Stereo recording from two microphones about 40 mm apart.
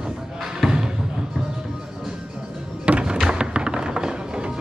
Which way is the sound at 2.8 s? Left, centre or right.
Right.